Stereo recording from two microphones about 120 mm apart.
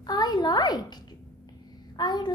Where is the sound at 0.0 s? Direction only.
35° left (ahead or behind).